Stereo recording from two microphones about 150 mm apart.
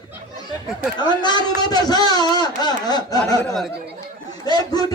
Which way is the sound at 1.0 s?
30° left (ahead or behind).